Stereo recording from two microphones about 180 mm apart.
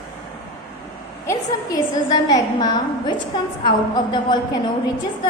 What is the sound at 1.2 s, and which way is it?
A woman's voice, 20° left (ahead or behind).